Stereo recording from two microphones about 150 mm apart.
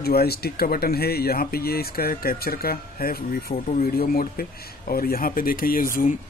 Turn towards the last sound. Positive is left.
turn(degrees=70)  # may be behind; listen again after turning